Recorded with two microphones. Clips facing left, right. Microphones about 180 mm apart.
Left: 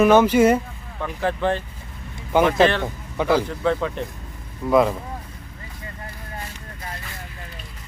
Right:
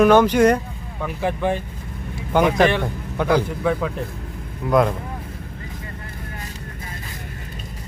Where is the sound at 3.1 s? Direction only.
5° left (ahead or behind).